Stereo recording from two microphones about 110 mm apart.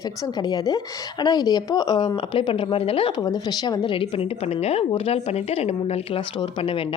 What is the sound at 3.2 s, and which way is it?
Speech, 35° left (ahead or behind).